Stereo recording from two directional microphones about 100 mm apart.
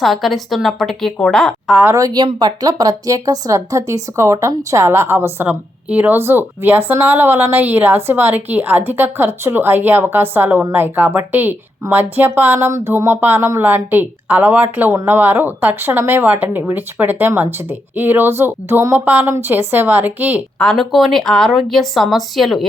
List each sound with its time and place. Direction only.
0.0 s a woman's voice: centre (ahead or behind)
2.0 s a woman's voice: 35° right (ahead or behind); by 20.4 s 15° right (ahead or behind)
20.6 s a woman's voice: 5° left (ahead or behind)